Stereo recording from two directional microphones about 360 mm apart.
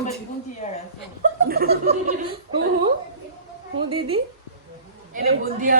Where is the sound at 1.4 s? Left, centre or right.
Right.